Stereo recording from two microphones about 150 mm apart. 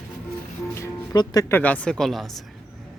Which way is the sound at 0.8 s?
25° left (ahead or behind).